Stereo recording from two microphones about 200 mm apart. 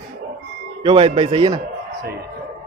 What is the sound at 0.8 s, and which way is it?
Speech, 30° right (ahead or behind).